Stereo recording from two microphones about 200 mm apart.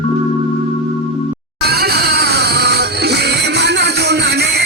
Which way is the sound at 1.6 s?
55° right (ahead or behind).